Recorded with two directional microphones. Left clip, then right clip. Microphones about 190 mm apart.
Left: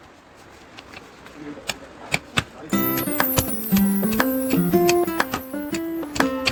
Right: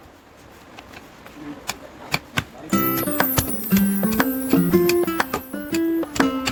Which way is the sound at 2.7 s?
Centre (ahead or behind).